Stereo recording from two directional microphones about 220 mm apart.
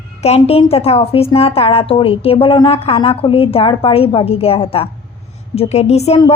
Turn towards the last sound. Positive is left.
turn(degrees=30)  # may be behind; listen again after turning